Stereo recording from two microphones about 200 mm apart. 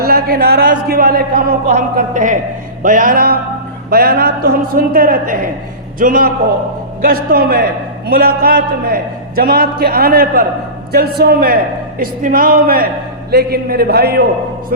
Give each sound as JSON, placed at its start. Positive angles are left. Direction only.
{"t": 0.0, "sound": "a man's voice", "side_deg": -50}